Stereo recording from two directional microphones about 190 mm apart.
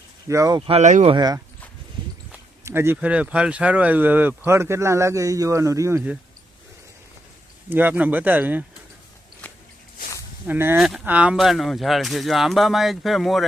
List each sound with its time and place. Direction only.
0.3 s speech: 15° right (ahead or behind)
0.7 s speech: 40° right (ahead or behind)
1.1 s speech: 20° right (ahead or behind)
2.6 s speech: 10° right (ahead or behind)
7.7 s speech: 10° right (ahead or behind)
10.4 s speech: 10° right (ahead or behind)